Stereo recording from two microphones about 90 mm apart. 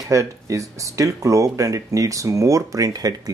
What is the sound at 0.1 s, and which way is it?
Speech, 35° right (ahead or behind).